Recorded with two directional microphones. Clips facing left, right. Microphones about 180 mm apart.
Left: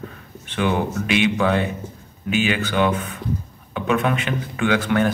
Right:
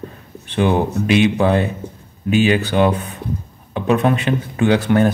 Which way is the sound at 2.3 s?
35° right (ahead or behind).